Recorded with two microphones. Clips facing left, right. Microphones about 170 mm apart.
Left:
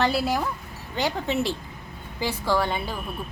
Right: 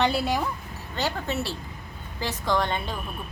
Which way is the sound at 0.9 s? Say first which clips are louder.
Left 3 dB; 15° left (ahead or behind).